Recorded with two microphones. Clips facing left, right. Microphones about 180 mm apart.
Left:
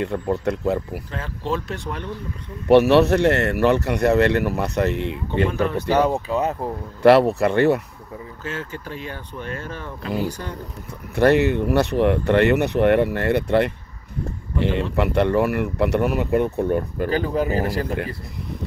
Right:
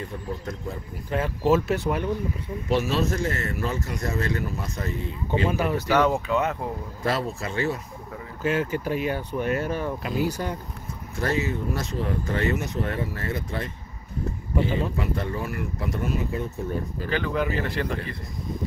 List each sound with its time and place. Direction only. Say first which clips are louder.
0.0 s speech: left 10 dB; 75° left (ahead or behind)
1.1 s speech: right 6 dB; 10° right (ahead or behind)
2.7 s speech: left 11 dB; 65° left (ahead or behind)
5.5 s speech: left 2 dB; 10° right (ahead or behind)
5.9 s speech: left 1 dB; 35° left (ahead or behind)
7.0 s speech: left 14 dB; 70° left (ahead or behind)
8.4 s speech: right 8 dB; 10° right (ahead or behind)
11.1 s speech: left 10 dB; 65° left (ahead or behind)
17.1 s speech: left 4 dB; 40° left (ahead or behind)